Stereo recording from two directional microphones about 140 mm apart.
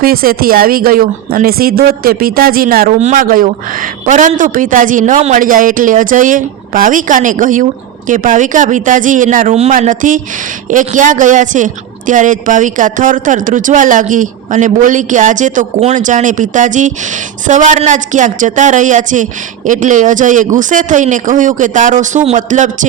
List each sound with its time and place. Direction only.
0.0 s speech: 90° right
3.0 s a woman's voice: 55° right (ahead or behind)
3.2 s a woman's voice: 85° right; by 22.9 s 60° right (ahead or behind)